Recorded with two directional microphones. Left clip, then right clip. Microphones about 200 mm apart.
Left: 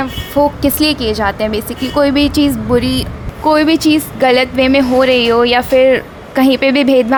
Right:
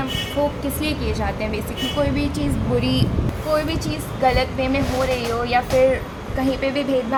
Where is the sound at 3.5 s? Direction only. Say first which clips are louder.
Left 12 dB; 55° left (ahead or behind).